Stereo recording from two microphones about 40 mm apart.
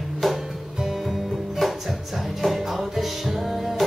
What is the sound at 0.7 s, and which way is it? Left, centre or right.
Music, centre.